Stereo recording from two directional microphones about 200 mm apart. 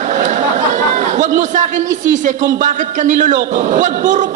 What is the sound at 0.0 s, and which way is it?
Chatter, 40° right (ahead or behind).